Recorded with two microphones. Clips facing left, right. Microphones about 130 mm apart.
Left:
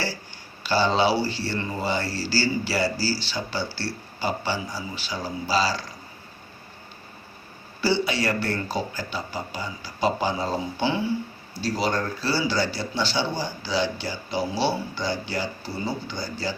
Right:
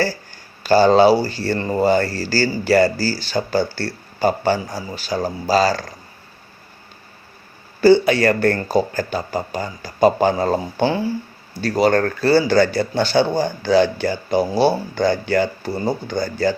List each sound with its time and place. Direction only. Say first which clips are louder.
0.6 s speech: right 9 dB; 45° right (ahead or behind)
7.8 s speech: right 11 dB; 50° right (ahead or behind)
11.6 s speech: right 9 dB; 55° right (ahead or behind)